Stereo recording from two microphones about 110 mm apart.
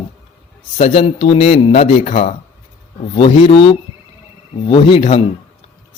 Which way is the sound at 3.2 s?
60° left (ahead or behind).